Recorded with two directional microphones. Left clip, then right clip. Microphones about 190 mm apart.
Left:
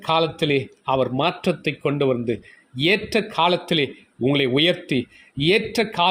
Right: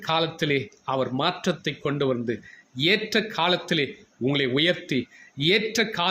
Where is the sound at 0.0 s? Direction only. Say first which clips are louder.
Left 4 dB; 20° left (ahead or behind).